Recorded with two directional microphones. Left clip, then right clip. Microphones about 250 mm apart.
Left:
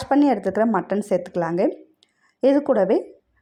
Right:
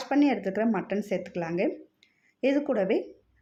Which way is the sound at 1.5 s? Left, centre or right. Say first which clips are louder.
Left 7 dB; centre.